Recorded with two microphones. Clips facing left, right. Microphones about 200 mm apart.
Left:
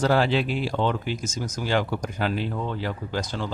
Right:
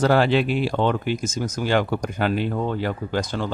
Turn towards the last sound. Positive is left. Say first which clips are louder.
# right 4 dB
turn(degrees=-55)  # may be behind; listen again after turning